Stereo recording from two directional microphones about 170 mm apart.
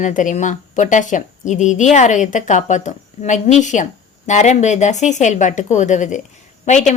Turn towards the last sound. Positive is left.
turn(degrees=45)  # may be behind; listen again after turning